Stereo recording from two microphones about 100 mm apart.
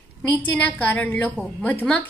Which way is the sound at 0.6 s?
15° left (ahead or behind).